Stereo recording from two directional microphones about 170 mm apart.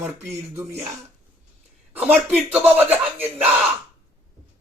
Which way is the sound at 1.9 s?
10° right (ahead or behind).